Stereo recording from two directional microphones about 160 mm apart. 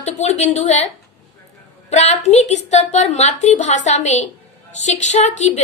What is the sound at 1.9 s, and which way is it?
A woman's voice, 45° left (ahead or behind).